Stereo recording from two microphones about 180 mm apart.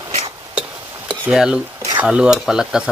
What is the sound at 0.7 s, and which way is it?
Stir, 10° right (ahead or behind).